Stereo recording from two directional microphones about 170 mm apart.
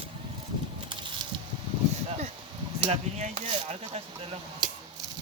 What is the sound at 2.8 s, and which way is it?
Speech, 40° right (ahead or behind).